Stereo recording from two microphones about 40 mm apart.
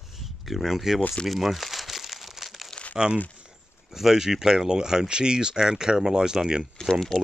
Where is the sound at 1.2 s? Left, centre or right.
Centre.